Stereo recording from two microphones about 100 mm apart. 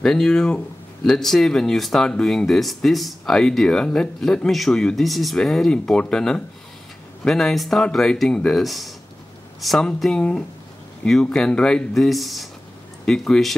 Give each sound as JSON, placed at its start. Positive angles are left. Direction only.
{"t": 0.0, "sound": "speech", "side_deg": 5}